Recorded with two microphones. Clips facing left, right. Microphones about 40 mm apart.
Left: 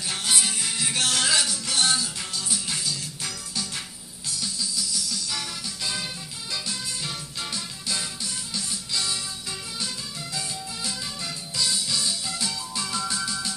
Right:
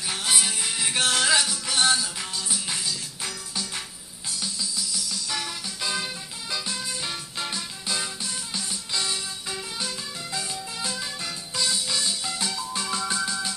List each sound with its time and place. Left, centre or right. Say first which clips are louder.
0.2 s music: even; centre
5.3 s music: right 1 dB; centre